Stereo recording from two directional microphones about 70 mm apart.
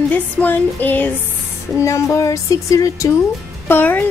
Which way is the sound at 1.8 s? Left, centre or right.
Left.